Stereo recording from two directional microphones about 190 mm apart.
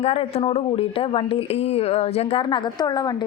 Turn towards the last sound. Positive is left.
turn(degrees=20)  # may be behind; listen again after turning